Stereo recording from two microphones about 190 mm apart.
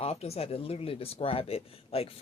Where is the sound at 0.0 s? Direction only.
35° left (ahead or behind).